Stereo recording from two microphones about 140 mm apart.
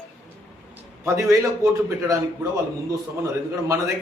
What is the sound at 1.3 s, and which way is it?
Speech, 25° right (ahead or behind).